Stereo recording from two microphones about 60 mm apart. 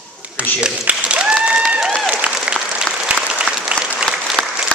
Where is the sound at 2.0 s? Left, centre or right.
Centre.